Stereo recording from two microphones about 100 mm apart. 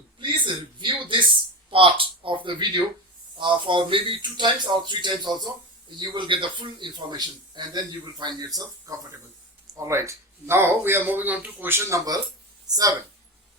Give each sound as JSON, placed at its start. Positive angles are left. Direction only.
{"t": 0.2, "sound": "a sound", "side_deg": -55}
{"t": 1.7, "sound": "a man's voice", "side_deg": -60}
{"t": 12.6, "sound": "speech", "side_deg": -40}